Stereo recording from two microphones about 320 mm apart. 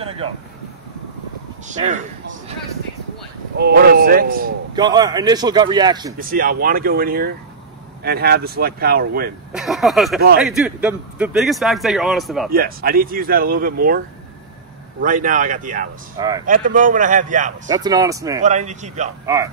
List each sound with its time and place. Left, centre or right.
1.7 s speech: right
3.5 s speech: right
4.7 s speech: centre
6.1 s speech: right
9.5 s speech: centre
12.4 s speech: right
16.2 s speech: centre
16.4 s speech: right
17.6 s speech: centre
18.4 s speech: right
19.2 s speech: centre